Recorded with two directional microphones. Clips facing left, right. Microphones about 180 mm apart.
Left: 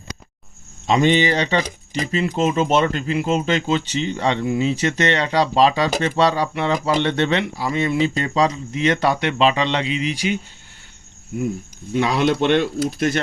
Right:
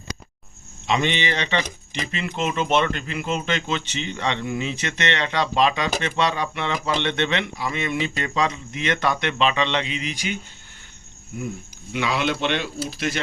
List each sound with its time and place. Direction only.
0.9 s speech: 40° left (ahead or behind)
11.9 s speech: 45° left (ahead or behind)